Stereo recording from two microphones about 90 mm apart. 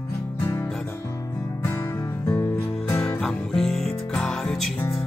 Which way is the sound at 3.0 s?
10° left (ahead or behind).